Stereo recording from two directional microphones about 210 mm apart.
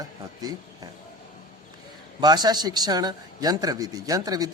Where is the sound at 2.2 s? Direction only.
20° right (ahead or behind).